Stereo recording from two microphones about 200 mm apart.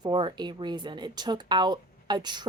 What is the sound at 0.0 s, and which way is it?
Speech, 25° right (ahead or behind).